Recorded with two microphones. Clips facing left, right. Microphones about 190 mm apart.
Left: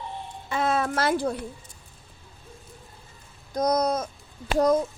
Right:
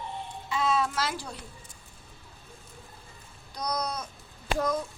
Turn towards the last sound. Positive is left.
turn(degrees=40)  # may be behind; listen again after turning